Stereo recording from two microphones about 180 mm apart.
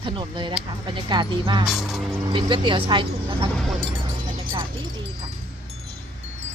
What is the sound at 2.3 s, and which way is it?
Speech, 30° right (ahead or behind).